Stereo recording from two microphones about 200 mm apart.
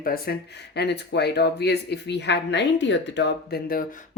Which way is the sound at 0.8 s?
55° left (ahead or behind).